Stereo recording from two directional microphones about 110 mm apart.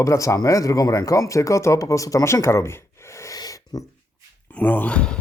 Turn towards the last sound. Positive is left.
turn(degrees=10)  # may be behind; listen again after turning